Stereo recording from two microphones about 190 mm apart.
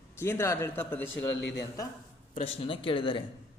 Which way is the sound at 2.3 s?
30° left (ahead or behind).